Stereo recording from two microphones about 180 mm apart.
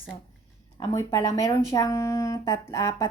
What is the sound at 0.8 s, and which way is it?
Speech, 20° left (ahead or behind).